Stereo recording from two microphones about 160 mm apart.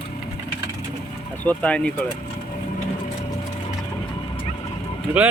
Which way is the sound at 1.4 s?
10° left (ahead or behind).